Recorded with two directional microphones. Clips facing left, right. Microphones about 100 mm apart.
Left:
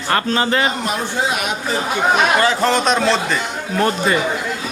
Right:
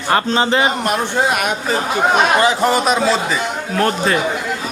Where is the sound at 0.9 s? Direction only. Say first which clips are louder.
Right 3 dB; 55° right (ahead or behind).